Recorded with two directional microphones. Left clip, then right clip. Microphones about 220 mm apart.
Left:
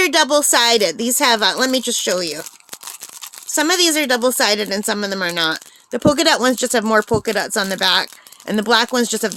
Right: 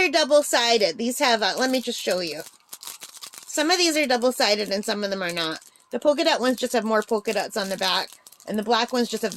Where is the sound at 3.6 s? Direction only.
20° left (ahead or behind).